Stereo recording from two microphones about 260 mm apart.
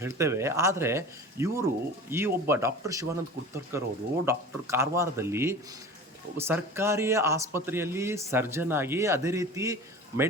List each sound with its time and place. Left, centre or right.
0.0 s a man's voice: centre